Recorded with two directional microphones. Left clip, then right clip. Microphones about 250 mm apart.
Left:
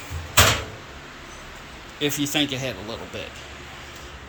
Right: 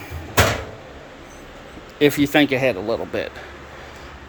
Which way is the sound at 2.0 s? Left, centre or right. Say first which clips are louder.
Right 8 dB; right.